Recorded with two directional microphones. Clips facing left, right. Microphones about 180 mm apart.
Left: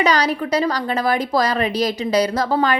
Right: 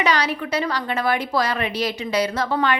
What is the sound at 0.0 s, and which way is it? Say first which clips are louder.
A woman's voice: left 3 dB; 40° left (ahead or behind).